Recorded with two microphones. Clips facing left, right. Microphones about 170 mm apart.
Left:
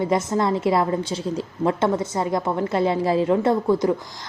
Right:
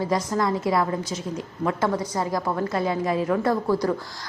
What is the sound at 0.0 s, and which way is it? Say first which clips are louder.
A woman's voice: left 3 dB; 25° left (ahead or behind).